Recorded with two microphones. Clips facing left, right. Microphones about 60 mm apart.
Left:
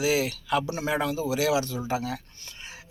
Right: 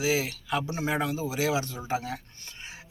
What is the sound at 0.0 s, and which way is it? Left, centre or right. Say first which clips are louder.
A man's voice: left 2 dB; right.